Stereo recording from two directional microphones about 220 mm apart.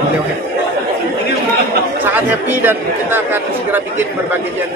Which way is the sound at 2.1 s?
10° right (ahead or behind).